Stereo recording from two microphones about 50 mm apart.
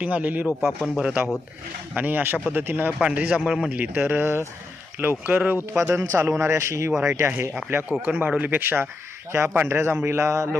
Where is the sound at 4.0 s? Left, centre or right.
Right.